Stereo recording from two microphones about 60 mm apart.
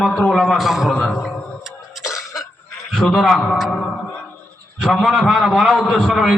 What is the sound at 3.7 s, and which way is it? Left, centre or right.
Music, centre.